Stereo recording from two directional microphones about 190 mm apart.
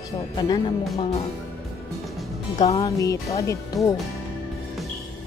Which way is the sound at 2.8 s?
15° left (ahead or behind).